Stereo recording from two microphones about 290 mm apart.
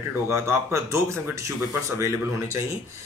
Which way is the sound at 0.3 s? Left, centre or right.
Centre.